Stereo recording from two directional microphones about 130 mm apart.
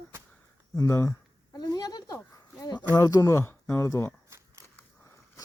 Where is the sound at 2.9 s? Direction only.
30° left (ahead or behind).